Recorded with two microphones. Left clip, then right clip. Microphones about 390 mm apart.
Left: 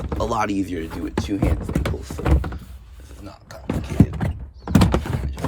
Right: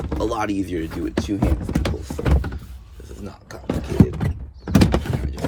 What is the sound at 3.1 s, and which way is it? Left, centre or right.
Vehicle, centre.